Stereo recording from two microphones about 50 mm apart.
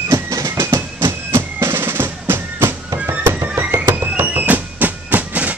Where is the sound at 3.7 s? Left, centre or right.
Right.